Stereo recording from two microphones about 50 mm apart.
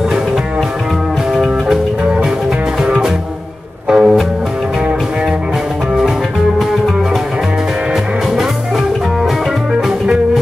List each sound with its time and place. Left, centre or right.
1.3 s music: centre
2.8 s music: centre
9.8 s music: centre